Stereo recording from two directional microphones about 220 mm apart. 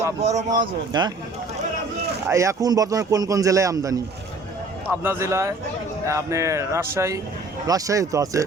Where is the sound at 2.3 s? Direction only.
15° right (ahead or behind).